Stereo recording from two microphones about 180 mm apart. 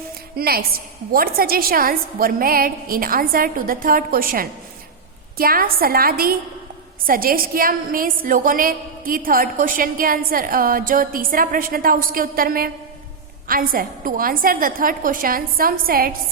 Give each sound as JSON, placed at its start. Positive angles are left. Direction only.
{"t": 0.3, "sound": "a woman's voice", "side_deg": -55}